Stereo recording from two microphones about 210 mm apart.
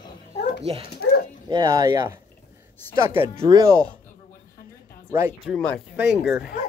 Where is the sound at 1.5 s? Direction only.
20° right (ahead or behind).